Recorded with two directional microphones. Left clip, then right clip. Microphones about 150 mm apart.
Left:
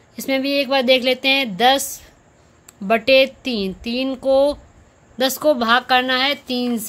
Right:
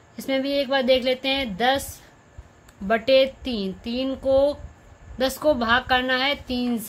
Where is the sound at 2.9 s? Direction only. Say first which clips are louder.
Left 4 dB; 40° left (ahead or behind).